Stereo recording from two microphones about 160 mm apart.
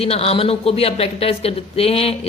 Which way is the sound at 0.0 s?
40° left (ahead or behind).